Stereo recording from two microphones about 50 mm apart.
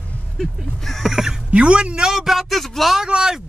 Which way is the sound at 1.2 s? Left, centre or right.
Centre.